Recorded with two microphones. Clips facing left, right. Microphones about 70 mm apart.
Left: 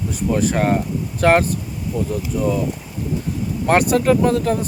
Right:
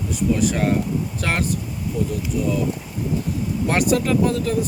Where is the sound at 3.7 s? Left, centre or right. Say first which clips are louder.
Left 5 dB; left.